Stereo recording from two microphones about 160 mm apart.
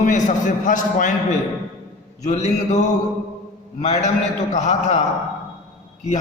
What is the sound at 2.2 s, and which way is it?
Speech, 45° left (ahead or behind).